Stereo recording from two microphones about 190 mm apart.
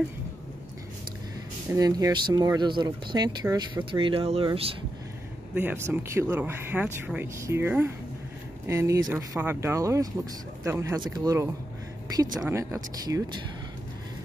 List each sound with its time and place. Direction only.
1.7 s speech: 20° right (ahead or behind)
5.5 s speech: 10° right (ahead or behind)